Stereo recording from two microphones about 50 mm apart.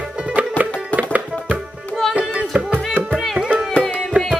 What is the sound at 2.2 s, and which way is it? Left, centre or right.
Music, centre.